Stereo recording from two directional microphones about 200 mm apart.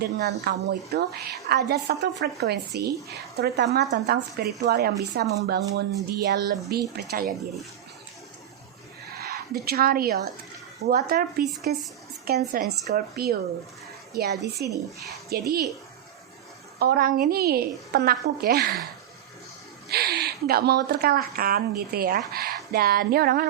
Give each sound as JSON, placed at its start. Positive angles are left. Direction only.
{"t": 0.0, "sound": "speech", "side_deg": -55}
{"t": 9.1, "sound": "speech", "side_deg": -50}
{"t": 16.7, "sound": "speech", "side_deg": -50}
{"t": 19.9, "sound": "speech", "side_deg": -55}